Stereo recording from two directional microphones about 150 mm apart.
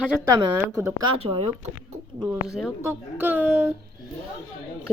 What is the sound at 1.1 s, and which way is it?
Speech, 40° right (ahead or behind).